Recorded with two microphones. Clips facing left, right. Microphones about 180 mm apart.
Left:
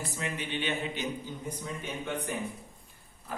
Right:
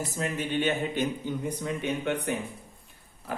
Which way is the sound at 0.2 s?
45° right (ahead or behind).